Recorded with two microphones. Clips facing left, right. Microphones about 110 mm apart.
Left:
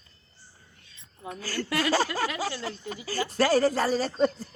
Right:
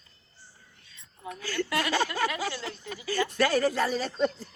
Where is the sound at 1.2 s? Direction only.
40° left (ahead or behind).